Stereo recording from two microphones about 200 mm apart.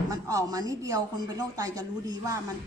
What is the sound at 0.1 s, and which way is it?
Speech, 15° right (ahead or behind).